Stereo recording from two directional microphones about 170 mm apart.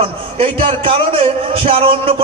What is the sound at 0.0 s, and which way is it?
A man's voice, 35° right (ahead or behind).